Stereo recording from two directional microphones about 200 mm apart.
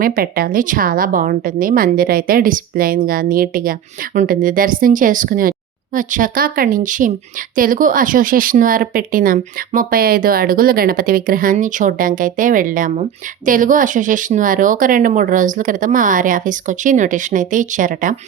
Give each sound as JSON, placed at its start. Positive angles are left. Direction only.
{"t": 0.0, "sound": "a woman's voice", "side_deg": -45}